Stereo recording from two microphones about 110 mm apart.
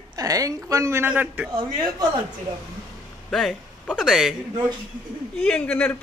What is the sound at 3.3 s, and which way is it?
Speech, 5° left (ahead or behind).